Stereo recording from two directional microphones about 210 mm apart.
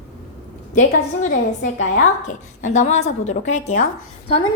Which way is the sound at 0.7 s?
35° left (ahead or behind).